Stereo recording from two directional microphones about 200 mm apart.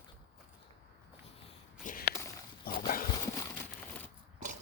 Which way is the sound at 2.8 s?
45° left (ahead or behind).